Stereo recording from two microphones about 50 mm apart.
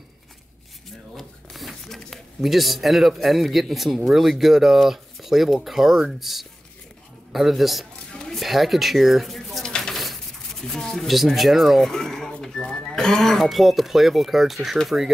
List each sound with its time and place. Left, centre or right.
1.1 s a man's voice: centre
8.1 s a sound: centre
8.4 s speech: centre
9.7 s a sound: centre
9.9 s speech: centre
11.9 s speech: centre